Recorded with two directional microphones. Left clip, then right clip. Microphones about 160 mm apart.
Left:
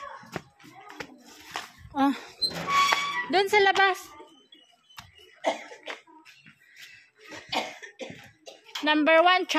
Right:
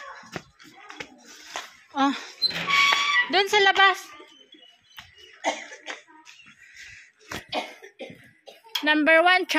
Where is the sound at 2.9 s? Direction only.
10° left (ahead or behind).